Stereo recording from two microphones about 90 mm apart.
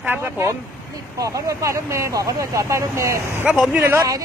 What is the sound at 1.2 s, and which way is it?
Speech, 35° right (ahead or behind).